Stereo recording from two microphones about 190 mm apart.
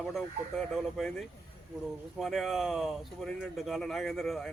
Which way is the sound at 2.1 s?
Centre (ahead or behind).